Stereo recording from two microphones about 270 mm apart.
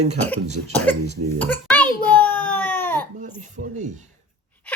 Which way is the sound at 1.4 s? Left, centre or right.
Centre.